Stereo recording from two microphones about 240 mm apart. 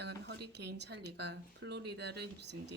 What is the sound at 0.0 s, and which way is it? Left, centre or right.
Speech, right.